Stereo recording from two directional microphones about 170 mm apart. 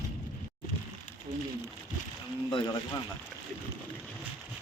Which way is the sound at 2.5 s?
30° left (ahead or behind).